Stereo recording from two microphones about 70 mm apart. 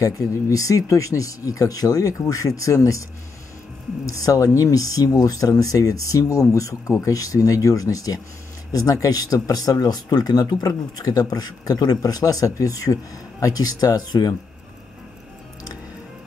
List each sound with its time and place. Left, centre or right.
0.0 s speech: left
4.0 s speech: left